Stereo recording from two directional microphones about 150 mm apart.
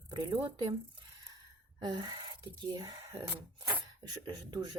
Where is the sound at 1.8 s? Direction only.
30° right (ahead or behind).